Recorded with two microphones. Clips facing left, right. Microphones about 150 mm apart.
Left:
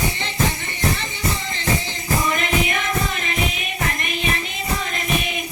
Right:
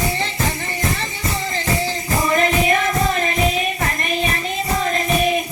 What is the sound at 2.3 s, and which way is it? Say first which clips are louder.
Music: right 5 dB; 35° right (ahead or behind).